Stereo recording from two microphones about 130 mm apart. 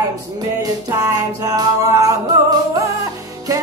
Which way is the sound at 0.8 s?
30° right (ahead or behind).